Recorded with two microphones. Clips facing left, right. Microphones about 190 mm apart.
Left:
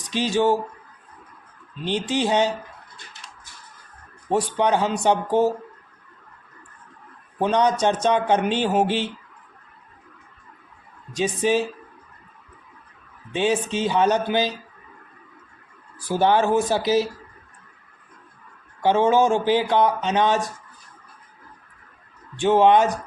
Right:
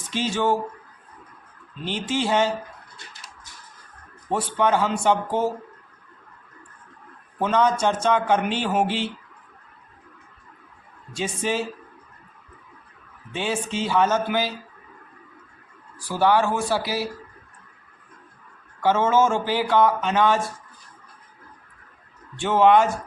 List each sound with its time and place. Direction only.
0.0 s speech: 15° left (ahead or behind)
1.8 s speech: 15° left (ahead or behind)
4.3 s speech: 15° left (ahead or behind)
7.3 s a man's voice: 20° left (ahead or behind)
11.1 s speech: 15° left (ahead or behind)
13.3 s a man's voice: 20° left (ahead or behind)
16.0 s a man's voice: 20° left (ahead or behind)
18.8 s a man's voice: 20° left (ahead or behind)
22.4 s speech: 20° left (ahead or behind)